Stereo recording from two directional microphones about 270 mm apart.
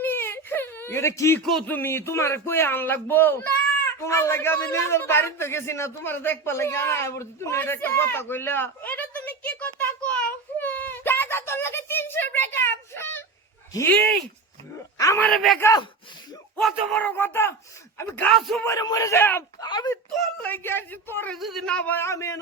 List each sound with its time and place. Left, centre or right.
0.0 s whimper: centre
1.5 s speech: centre
4.0 s a sound: centre
13.7 s speech: centre
18.7 s speech: centre